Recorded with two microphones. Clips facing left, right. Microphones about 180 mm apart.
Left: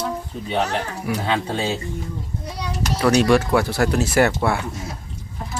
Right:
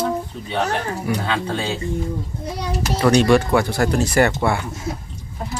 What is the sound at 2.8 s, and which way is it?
Speech, 5° left (ahead or behind).